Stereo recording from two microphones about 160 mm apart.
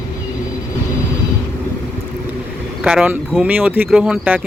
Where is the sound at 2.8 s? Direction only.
5° right (ahead or behind).